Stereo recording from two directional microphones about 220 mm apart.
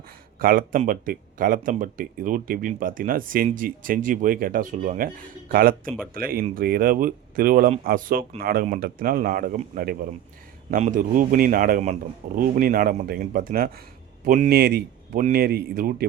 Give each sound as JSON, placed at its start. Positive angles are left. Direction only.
{"t": 0.3, "sound": "speech", "side_deg": -40}